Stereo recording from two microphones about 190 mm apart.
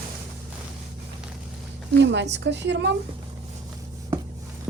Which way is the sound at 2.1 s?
65° right (ahead or behind).